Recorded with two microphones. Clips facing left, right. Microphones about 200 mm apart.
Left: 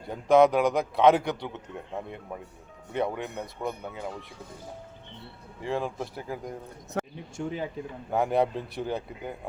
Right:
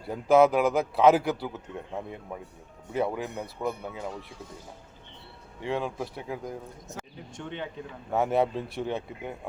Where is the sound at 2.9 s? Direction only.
5° right (ahead or behind).